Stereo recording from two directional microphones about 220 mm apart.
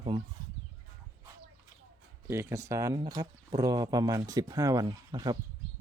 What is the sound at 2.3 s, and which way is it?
Speech, 10° right (ahead or behind).